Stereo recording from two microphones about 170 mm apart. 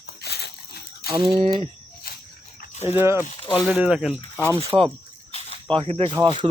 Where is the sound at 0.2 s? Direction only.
70° left (ahead or behind).